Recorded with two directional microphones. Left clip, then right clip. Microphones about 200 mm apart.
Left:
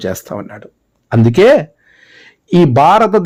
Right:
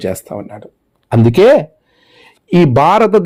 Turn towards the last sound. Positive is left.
turn(degrees=5)  # may be behind; listen again after turning